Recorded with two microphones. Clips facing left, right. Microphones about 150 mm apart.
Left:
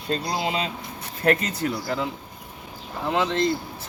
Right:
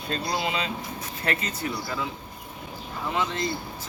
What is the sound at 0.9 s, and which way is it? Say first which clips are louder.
Speech: left 10 dB; 50° left (ahead or behind).